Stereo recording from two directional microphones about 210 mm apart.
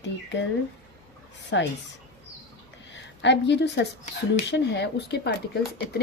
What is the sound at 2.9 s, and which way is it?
A woman's voice, 60° left (ahead or behind).